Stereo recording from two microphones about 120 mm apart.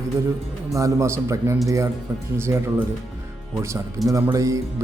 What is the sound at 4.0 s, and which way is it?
Speech, 30° right (ahead or behind).